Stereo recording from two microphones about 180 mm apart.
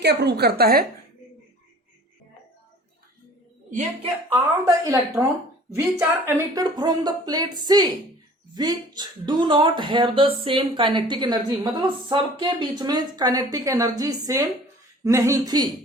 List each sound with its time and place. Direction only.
0.0 s a woman's voice: 65° right (ahead or behind)
4.3 s speech: 15° right (ahead or behind)
6.0 s speech: 15° right (ahead or behind)